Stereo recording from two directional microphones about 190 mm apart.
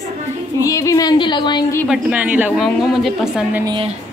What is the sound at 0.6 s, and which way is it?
Speech, 15° left (ahead or behind).